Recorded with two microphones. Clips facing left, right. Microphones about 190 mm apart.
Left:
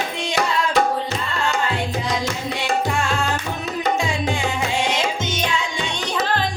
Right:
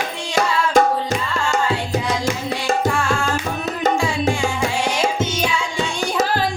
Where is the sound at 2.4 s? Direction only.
45° right (ahead or behind).